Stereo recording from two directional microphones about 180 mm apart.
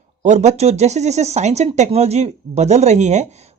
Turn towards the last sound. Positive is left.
turn(degrees=-40)  # may be behind; listen again after turning